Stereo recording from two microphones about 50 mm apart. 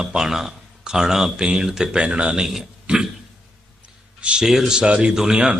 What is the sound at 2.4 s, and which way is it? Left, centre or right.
Speech, centre.